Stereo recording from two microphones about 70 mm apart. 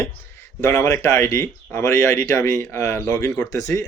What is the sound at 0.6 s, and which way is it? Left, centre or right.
Speech, left.